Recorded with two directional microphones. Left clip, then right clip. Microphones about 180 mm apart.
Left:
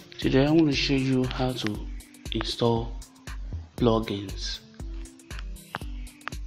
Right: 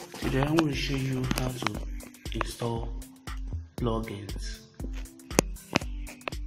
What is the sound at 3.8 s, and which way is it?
Speech, 40° left (ahead or behind).